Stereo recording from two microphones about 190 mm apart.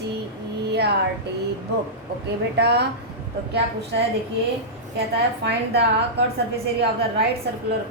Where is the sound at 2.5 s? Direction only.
60° right (ahead or behind).